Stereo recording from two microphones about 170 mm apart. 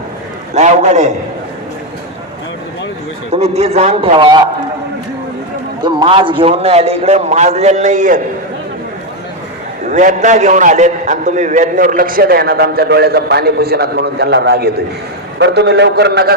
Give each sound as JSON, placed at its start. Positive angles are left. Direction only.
{"t": 0.5, "sound": "a man's voice", "side_deg": -40}
{"t": 3.3, "sound": "a man's voice", "side_deg": -40}
{"t": 5.8, "sound": "a man's voice", "side_deg": -30}
{"t": 9.8, "sound": "a man's voice", "side_deg": -45}
{"t": 15.4, "sound": "a man's voice", "side_deg": -85}